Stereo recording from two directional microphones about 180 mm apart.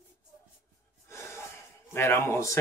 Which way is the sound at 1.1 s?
15° left (ahead or behind).